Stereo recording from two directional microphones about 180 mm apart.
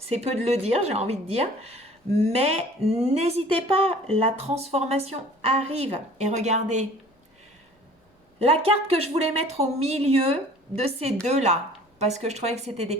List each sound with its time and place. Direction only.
0.1 s speech: 35° right (ahead or behind)
8.4 s speech: 35° right (ahead or behind)